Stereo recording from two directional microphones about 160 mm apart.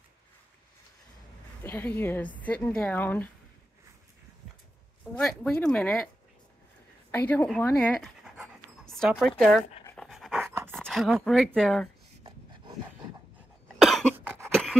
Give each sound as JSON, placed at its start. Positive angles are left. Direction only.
{"t": 1.6, "sound": "speech", "side_deg": 15}
{"t": 5.1, "sound": "speech", "side_deg": 5}
{"t": 7.1, "sound": "speech", "side_deg": 10}
{"t": 8.0, "sound": "pant", "side_deg": -5}
{"t": 10.7, "sound": "speech", "side_deg": 0}
{"t": 12.2, "sound": "wood", "side_deg": -30}
{"t": 13.7, "sound": "cough", "side_deg": 0}
{"t": 14.4, "sound": "a sound", "side_deg": 0}